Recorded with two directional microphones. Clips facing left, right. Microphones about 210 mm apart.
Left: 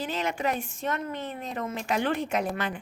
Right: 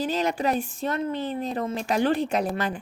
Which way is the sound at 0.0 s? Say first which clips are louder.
Right 4 dB; 35° right (ahead or behind).